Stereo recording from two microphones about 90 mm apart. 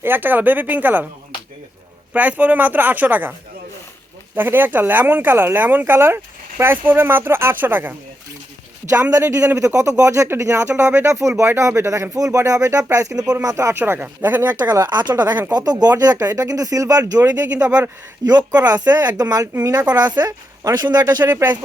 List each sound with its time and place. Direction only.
0.0 s speech: 20° right (ahead or behind)
2.1 s speech: 15° right (ahead or behind)
4.4 s speech: 25° right (ahead or behind)
8.9 s speech: 35° right (ahead or behind)
13.7 s speech: 25° right (ahead or behind)
14.6 s speech: 45° right (ahead or behind)
17.7 s speech: 15° right (ahead or behind)
18.3 s speech: 45° right (ahead or behind)
21.2 s speech: 25° right (ahead or behind)